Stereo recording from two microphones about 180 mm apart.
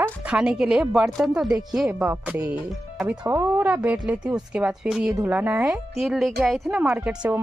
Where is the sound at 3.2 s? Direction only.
15° right (ahead or behind).